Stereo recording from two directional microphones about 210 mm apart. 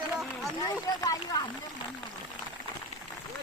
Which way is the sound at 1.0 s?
15° left (ahead or behind).